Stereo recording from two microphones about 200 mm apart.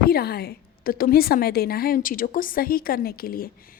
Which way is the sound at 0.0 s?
50° left (ahead or behind).